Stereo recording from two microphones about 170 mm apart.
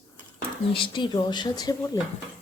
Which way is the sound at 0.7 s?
30° left (ahead or behind).